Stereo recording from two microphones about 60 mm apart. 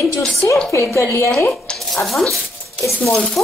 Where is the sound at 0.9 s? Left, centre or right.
Left.